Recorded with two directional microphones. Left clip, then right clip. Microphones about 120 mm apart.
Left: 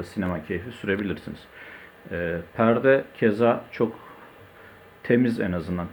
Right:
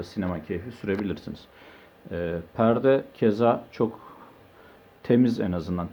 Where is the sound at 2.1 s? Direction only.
30° right (ahead or behind).